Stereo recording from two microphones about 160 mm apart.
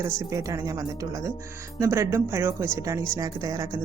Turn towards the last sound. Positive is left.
turn(degrees=-20)  # may be behind; listen again after turning